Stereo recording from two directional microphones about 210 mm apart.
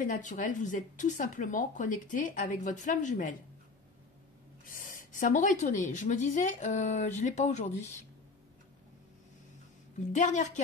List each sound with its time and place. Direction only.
0.0 s speech: 40° left (ahead or behind)
4.6 s speech: 40° left (ahead or behind)
10.1 s speech: 35° left (ahead or behind)